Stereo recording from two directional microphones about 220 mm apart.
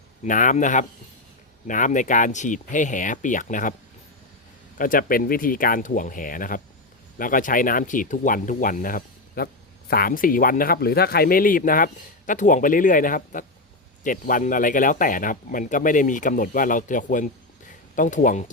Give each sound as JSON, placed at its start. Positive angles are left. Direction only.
{"t": 0.3, "sound": "speech", "side_deg": 35}
{"t": 4.8, "sound": "speech", "side_deg": 40}